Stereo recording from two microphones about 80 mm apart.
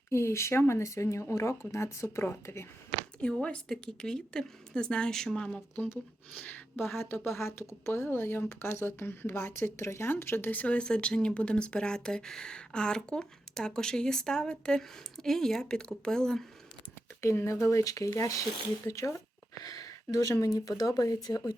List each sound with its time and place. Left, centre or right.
0.1 s speech: left
3.4 s speech: centre
6.4 s speech: left; by 16.5 s centre
17.2 s speech: left
19.5 s a sound: left
20.4 s speech: left